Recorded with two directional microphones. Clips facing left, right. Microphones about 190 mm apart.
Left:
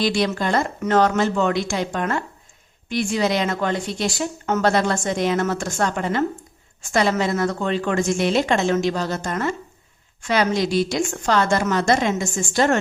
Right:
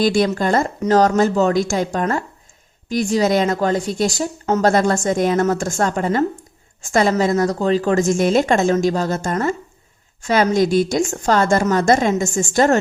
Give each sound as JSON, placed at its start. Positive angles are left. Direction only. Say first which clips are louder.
{"t": 0.0, "sound": "a woman's voice", "louder": "right 4 dB", "side_deg": -50}